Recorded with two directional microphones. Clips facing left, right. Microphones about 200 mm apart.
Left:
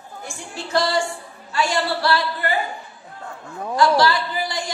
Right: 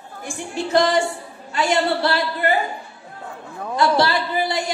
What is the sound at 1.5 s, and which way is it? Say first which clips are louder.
A woman's voice: right 3 dB; 20° right (ahead or behind).